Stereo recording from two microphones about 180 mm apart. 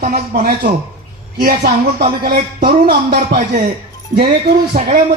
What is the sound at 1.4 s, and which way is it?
Speech, 60° right (ahead or behind).